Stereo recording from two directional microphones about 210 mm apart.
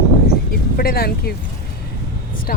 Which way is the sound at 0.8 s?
45° left (ahead or behind).